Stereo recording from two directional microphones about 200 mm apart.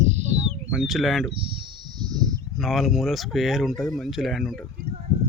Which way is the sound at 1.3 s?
25° right (ahead or behind).